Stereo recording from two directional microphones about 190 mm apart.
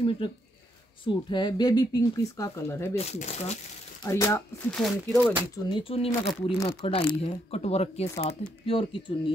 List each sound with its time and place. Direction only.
1.0 s speech: 25° left (ahead or behind)
3.0 s speech: 35° left (ahead or behind)
4.0 s speech: 15° left (ahead or behind)
4.6 s speech: 5° left (ahead or behind)
5.7 s speech: 25° left (ahead or behind)